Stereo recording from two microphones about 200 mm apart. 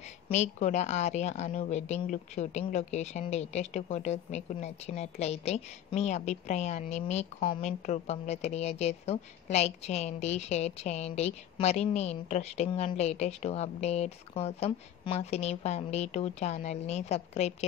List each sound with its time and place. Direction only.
0.3 s a woman's voice: 35° left (ahead or behind)